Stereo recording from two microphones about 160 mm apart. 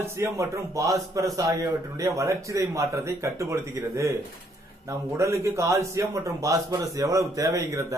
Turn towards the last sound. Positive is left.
turn(degrees=-20)  # may be behind; listen again after turning